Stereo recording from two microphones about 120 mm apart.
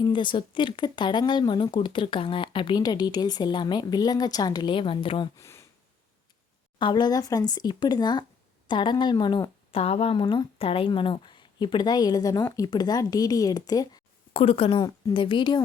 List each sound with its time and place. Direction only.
0.0 s speech: 40° left (ahead or behind)
5.4 s a sound: 25° left (ahead or behind)
6.7 s speech: 40° left (ahead or behind)
9.7 s speech: 55° left (ahead or behind); by 14.0 s 35° left (ahead or behind)
14.3 s speech: 50° left (ahead or behind)
14.8 s speech: 35° left (ahead or behind)